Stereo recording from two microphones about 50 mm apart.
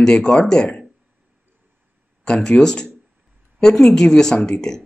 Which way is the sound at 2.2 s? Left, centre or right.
Centre.